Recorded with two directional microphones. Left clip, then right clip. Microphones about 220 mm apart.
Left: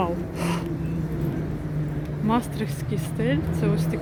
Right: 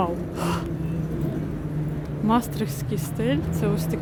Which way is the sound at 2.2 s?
5° right (ahead or behind).